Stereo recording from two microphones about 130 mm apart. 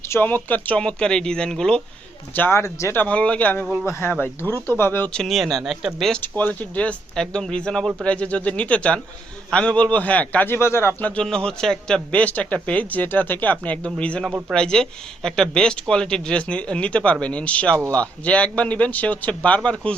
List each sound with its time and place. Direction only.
0.1 s speech: 15° left (ahead or behind)
2.3 s speech: 15° left (ahead or behind)
5.2 s speech: centre (ahead or behind)
6.2 s speech: 15° left (ahead or behind)